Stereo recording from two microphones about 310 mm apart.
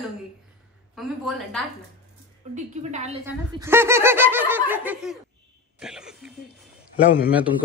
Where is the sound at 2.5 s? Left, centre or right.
Right.